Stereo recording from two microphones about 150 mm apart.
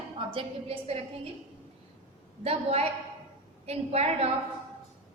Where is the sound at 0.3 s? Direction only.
35° right (ahead or behind).